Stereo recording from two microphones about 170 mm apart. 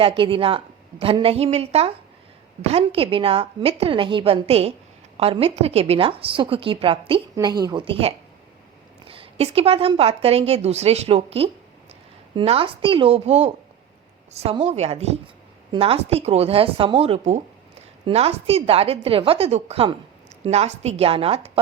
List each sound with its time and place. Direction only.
0.2 s a woman's voice: 30° right (ahead or behind)